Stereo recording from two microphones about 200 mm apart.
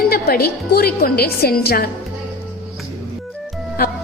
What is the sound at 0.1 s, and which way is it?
A woman's voice, 50° left (ahead or behind).